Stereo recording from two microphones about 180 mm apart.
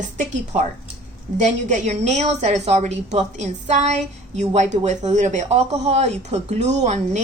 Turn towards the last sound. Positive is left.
turn(degrees=-40)  # may be behind; listen again after turning